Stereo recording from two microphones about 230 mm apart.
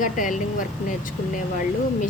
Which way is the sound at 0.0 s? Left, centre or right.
Left.